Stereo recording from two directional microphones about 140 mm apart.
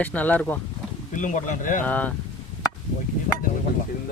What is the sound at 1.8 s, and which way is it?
Speech, 10° left (ahead or behind).